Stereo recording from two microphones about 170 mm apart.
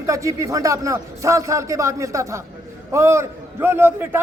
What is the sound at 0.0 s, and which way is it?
Speech, 20° right (ahead or behind).